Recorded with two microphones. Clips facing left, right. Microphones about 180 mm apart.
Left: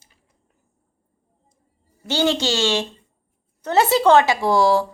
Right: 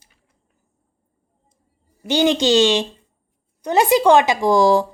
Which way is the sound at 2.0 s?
15° right (ahead or behind).